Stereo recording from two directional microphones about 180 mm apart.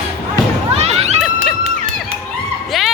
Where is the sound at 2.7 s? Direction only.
Centre (ahead or behind).